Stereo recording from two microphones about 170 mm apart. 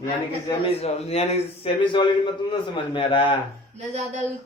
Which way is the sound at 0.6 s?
35° left (ahead or behind).